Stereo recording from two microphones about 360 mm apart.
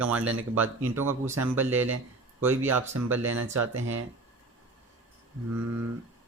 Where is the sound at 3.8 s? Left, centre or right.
Right.